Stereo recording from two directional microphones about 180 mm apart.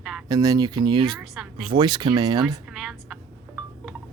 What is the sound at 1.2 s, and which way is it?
Speech, 5° right (ahead or behind).